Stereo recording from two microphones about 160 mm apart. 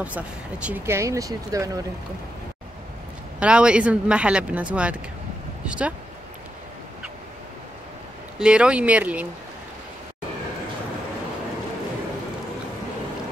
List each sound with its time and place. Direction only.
0.0 s speech: 5° right (ahead or behind)
3.3 s speech: 5° right (ahead or behind)
8.4 s speech: 5° right (ahead or behind)